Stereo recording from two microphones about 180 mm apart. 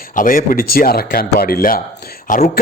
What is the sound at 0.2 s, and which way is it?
A man's voice, 50° left (ahead or behind).